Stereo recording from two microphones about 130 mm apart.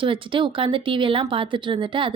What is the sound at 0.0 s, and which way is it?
Speech, 40° right (ahead or behind).